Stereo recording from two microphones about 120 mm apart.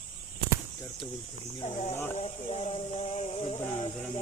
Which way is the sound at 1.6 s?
65° left (ahead or behind).